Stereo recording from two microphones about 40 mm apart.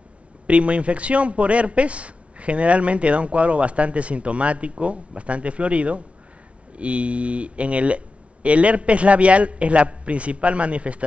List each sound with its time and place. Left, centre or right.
0.5 s a man's voice: right